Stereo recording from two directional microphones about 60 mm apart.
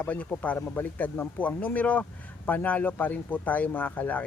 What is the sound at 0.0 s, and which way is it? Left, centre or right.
Speech, left.